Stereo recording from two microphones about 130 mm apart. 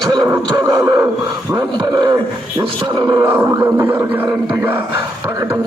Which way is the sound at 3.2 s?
15° right (ahead or behind).